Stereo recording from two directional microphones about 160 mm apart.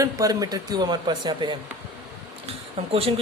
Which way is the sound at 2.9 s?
35° right (ahead or behind).